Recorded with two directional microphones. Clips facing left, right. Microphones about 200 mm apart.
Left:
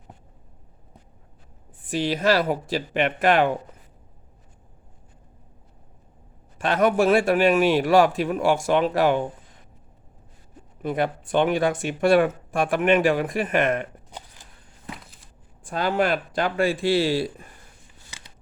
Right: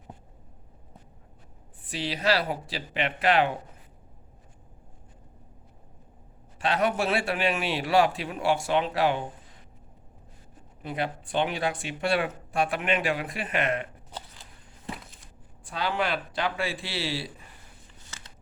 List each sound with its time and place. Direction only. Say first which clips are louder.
1.8 s speech: left 7 dB; 45° left (ahead or behind)
6.6 s speech: left 6 dB; 45° left (ahead or behind)
10.8 s speech: left 7 dB; 50° left (ahead or behind)
14.1 s a sound: right 2 dB; 10° left (ahead or behind)
14.9 s a sound: right 1 dB; centre (ahead or behind)
15.6 s speech: left 6 dB; 50° left (ahead or behind)